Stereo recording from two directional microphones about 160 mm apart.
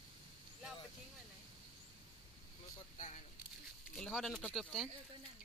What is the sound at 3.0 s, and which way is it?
Speech, 45° left (ahead or behind).